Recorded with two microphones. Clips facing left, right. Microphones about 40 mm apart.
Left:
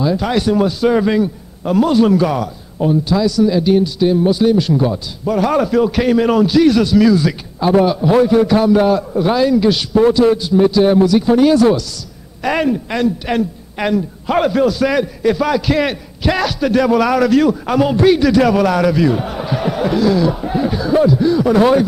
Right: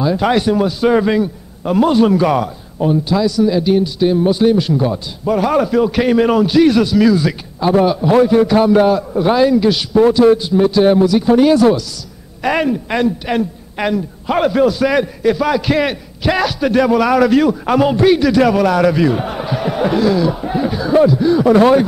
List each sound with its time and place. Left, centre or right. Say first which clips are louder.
0.2 s a man's voice: right 1 dB; centre
2.2 s a man's voice: right 3 dB; right